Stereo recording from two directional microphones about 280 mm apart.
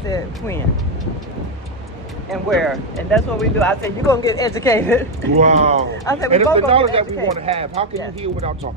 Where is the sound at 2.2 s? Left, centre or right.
Centre.